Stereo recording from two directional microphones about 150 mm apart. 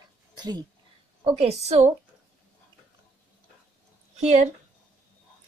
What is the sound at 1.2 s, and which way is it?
Speech, 45° right (ahead or behind).